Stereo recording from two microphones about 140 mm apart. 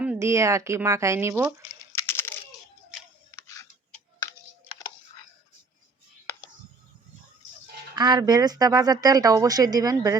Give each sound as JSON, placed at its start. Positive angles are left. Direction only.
{"t": 0.2, "sound": "speech", "side_deg": -20}
{"t": 1.8, "sound": "a sound", "side_deg": 20}
{"t": 3.3, "sound": "tick", "side_deg": 25}
{"t": 7.9, "sound": "speech", "side_deg": -30}